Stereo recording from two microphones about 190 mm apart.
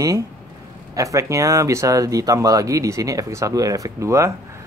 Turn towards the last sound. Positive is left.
turn(degrees=-15)  # may be behind; listen again after turning